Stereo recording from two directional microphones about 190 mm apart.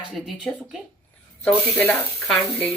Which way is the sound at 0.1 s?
Centre (ahead or behind).